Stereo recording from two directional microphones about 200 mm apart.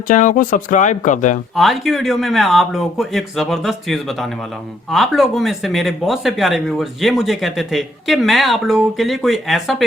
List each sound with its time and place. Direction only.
0.1 s speech: 40° left (ahead or behind)
1.5 s speech: centre (ahead or behind)